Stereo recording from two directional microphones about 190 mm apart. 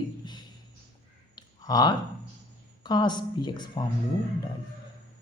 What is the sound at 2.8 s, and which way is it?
A woman's voice, 20° left (ahead or behind).